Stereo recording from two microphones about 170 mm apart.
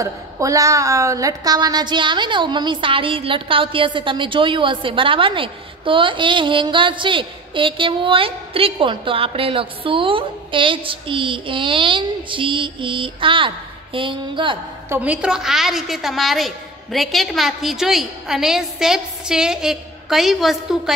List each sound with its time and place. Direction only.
0.0 s a woman's voice: 20° right (ahead or behind)
14.9 s a woman's voice: 10° right (ahead or behind)